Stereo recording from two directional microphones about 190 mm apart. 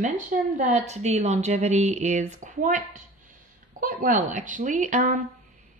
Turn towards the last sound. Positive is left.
turn(degrees=-40)  # may be behind; listen again after turning